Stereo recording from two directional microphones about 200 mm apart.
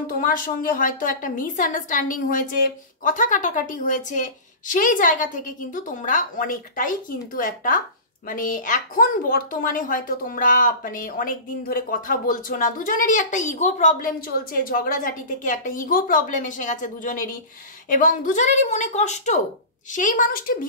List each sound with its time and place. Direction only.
0.0 s a woman's voice: 45° left (ahead or behind)